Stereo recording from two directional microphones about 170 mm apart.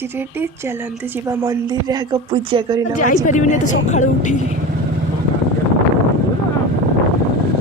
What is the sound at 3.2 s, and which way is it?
A woman's voice, 45° left (ahead or behind).